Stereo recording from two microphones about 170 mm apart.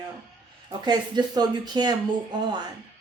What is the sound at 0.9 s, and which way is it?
Speech, 25° right (ahead or behind).